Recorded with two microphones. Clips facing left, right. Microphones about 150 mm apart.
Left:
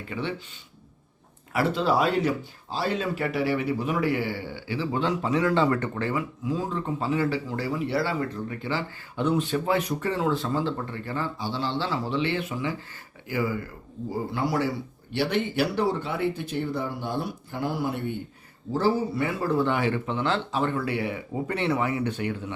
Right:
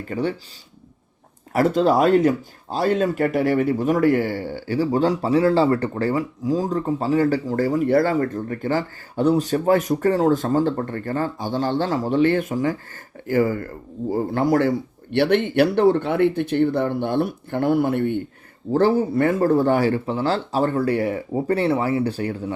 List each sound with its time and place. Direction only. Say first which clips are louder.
0.1 s speech: right 7 dB; 40° right (ahead or behind)
1.5 s speech: right 6 dB; 45° right (ahead or behind)